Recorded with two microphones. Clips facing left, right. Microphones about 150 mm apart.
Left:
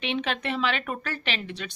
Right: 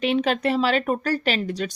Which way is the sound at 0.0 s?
40° right (ahead or behind).